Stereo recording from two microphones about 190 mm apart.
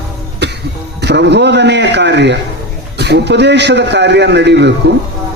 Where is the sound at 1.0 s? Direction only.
65° right (ahead or behind).